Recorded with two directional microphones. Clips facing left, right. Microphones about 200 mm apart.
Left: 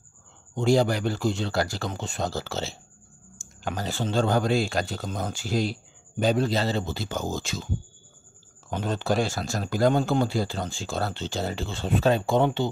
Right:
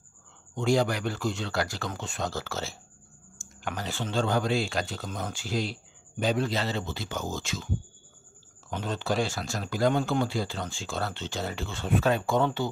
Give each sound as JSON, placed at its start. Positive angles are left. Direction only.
{"t": 0.6, "sound": "speech", "side_deg": 30}
{"t": 3.6, "sound": "speech", "side_deg": 35}